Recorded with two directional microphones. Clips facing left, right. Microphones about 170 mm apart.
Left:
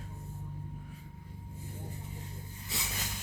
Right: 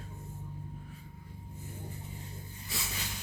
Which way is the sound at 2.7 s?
20° left (ahead or behind).